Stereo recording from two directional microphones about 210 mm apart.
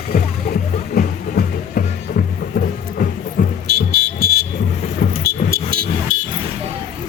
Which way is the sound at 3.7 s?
50° right (ahead or behind).